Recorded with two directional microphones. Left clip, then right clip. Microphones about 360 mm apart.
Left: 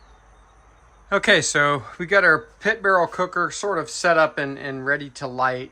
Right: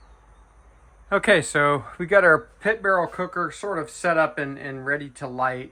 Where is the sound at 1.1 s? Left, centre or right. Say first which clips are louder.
Left 1 dB; centre.